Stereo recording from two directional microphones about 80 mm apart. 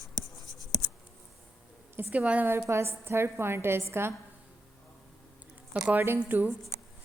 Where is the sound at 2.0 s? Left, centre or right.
Right.